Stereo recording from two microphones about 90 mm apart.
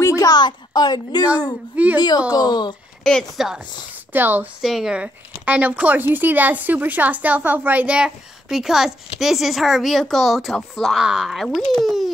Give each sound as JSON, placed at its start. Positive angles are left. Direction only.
{"t": 0.0, "sound": "a sound", "side_deg": 40}
{"t": 2.0, "sound": "a woman's voice", "side_deg": 50}
{"t": 3.0, "sound": "a woman's voice", "side_deg": 5}
{"t": 4.1, "sound": "a woman's voice", "side_deg": -20}
{"t": 4.6, "sound": "a woman's voice", "side_deg": -5}